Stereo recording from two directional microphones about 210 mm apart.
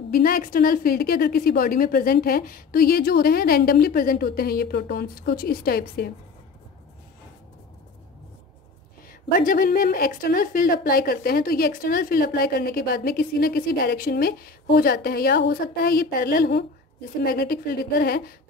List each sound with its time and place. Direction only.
0.1 s a woman's voice: 45° left (ahead or behind)
9.3 s a woman's voice: 40° left (ahead or behind)